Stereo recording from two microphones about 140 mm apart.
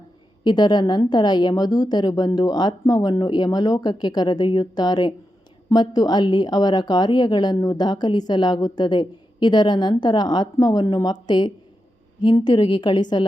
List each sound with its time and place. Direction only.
0.4 s a woman's voice: 30° left (ahead or behind)